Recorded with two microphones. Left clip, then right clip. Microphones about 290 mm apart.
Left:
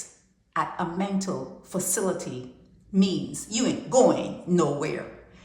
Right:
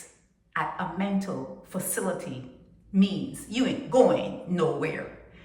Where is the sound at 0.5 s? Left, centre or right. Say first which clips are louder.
Left 2 dB; centre.